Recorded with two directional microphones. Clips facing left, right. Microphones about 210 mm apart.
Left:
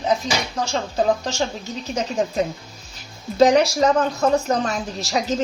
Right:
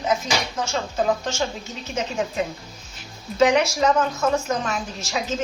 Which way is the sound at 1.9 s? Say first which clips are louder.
Left 3 dB; 40° left (ahead or behind).